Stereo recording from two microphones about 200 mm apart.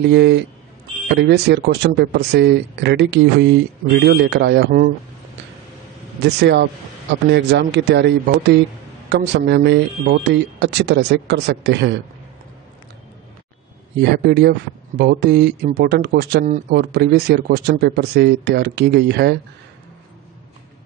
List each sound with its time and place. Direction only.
0.0 s speech: 60° right (ahead or behind)
6.2 s speech: 55° right (ahead or behind)
14.1 s speech: 50° right (ahead or behind)